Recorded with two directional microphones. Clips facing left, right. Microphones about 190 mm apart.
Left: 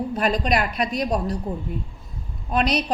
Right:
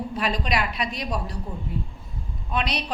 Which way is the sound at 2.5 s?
40° left (ahead or behind).